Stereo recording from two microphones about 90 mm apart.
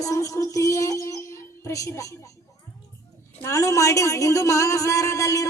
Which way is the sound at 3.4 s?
35° left (ahead or behind).